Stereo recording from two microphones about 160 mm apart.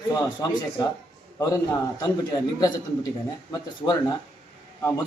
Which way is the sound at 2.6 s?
20° left (ahead or behind).